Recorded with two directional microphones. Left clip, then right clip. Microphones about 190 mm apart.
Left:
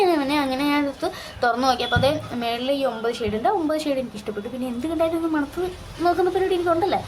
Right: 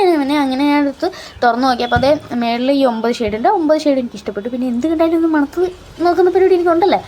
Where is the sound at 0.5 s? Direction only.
30° right (ahead or behind).